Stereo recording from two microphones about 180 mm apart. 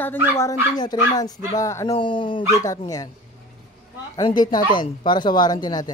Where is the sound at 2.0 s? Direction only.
30° left (ahead or behind).